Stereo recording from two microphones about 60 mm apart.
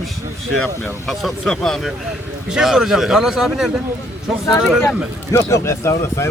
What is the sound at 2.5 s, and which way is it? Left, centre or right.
Speech, centre.